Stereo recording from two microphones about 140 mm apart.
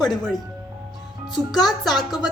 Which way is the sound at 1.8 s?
Centre (ahead or behind).